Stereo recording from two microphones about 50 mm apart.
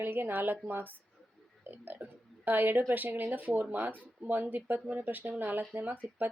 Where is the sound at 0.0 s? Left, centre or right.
Right.